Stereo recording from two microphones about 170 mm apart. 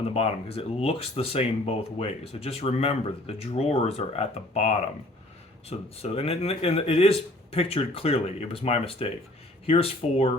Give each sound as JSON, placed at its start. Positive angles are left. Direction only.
{"t": 0.1, "sound": "speech", "side_deg": 35}